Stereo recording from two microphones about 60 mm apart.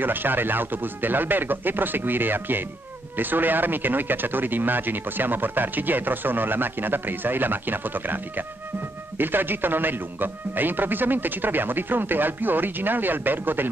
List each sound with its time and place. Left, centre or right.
0.0 s speech: right